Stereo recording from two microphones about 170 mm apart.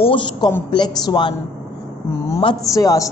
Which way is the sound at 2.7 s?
20° left (ahead or behind).